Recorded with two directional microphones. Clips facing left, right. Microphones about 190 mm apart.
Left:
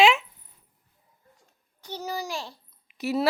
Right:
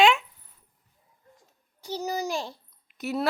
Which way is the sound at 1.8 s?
10° right (ahead or behind).